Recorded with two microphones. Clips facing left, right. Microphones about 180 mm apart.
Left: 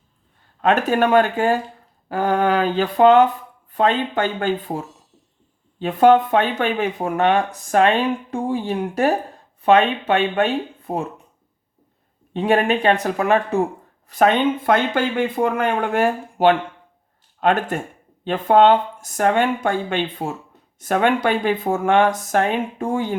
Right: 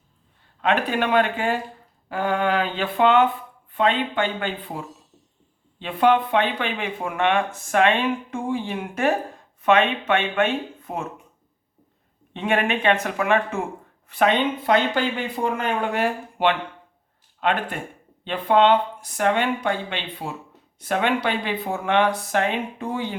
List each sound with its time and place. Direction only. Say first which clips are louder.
0.6 s speech: left 5 dB; 45° left (ahead or behind)
5.8 s speech: left 5 dB; 45° left (ahead or behind)
12.3 s speech: left 5 dB; 35° left (ahead or behind)